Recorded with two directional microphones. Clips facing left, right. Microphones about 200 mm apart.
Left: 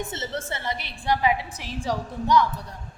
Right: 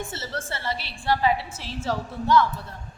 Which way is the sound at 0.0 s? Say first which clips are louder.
Left 2 dB; 20° left (ahead or behind).